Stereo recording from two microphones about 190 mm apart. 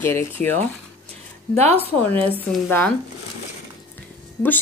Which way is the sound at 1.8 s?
10° left (ahead or behind).